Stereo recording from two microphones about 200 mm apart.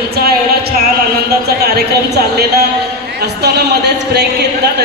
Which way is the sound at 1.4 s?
50° right (ahead or behind).